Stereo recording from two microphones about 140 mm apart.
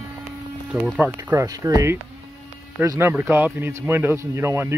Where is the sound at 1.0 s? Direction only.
20° right (ahead or behind).